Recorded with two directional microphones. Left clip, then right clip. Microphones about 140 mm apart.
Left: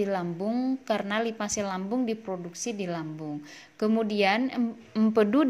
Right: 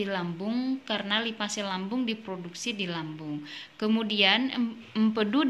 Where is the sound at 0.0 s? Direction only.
45° left (ahead or behind).